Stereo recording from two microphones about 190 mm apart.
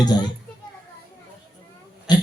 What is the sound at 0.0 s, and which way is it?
Speech, 20° left (ahead or behind).